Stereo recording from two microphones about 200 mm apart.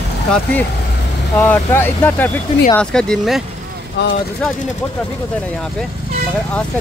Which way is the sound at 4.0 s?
60° left (ahead or behind).